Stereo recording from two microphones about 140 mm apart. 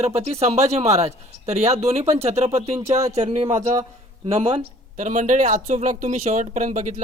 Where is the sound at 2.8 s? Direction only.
25° right (ahead or behind).